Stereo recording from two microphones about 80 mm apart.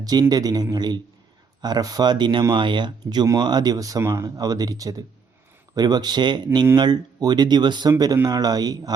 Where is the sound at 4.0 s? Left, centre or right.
Right.